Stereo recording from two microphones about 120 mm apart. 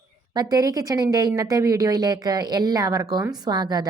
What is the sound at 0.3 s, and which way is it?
Speech, 30° right (ahead or behind).